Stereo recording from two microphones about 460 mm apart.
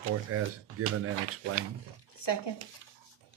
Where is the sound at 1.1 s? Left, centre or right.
Right.